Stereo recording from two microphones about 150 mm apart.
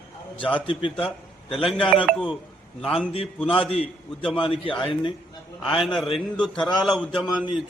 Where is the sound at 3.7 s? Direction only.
40° left (ahead or behind).